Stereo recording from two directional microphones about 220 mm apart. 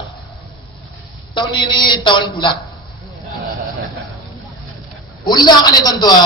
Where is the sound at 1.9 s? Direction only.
20° left (ahead or behind).